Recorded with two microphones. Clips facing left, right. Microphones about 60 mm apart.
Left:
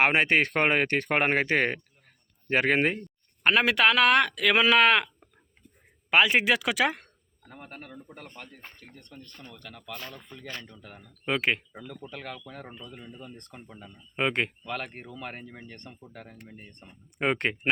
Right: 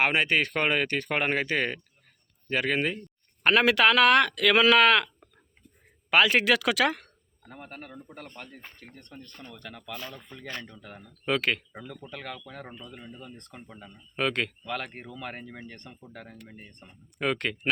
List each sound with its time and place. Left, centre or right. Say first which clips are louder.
0.0 s speech: left 2 dB; left
3.4 s speech: right 1 dB; centre
9.0 s speech: right 2 dB; right
9.4 s speech: right 4 dB; centre
11.3 s speech: even; centre
11.7 s speech: right 1 dB; centre
12.0 s speech: even; centre
14.2 s speech: left 1 dB; left
14.6 s speech: right 1 dB; centre
14.8 s speech: right 1 dB; centre
15.1 s speech: right 1 dB; centre
17.2 s speech: left 2 dB; left